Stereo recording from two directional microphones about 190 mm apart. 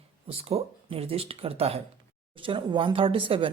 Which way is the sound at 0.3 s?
30° right (ahead or behind).